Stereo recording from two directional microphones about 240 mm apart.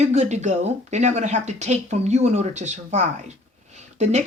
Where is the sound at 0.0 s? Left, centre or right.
Right.